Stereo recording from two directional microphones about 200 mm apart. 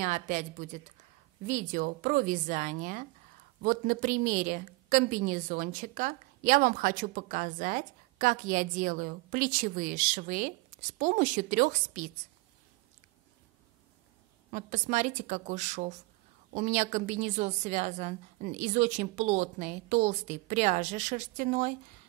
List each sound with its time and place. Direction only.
0.0 s a woman's voice: 40° right (ahead or behind)
14.5 s a woman's voice: 35° right (ahead or behind)